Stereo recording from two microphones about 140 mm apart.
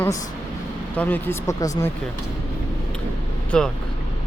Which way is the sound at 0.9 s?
10° left (ahead or behind).